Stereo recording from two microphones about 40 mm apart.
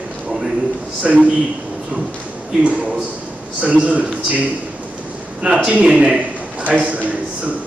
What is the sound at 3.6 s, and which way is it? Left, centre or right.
Speech, right.